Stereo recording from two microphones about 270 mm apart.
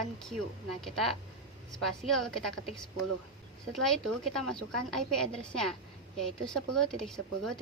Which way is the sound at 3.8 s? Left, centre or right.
Centre.